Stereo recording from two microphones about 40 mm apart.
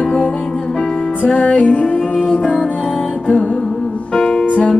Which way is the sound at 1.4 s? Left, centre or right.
Left.